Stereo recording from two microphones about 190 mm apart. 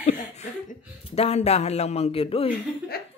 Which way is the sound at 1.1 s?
35° left (ahead or behind).